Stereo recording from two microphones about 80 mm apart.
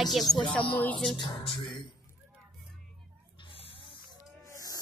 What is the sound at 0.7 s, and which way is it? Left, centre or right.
Speech, centre.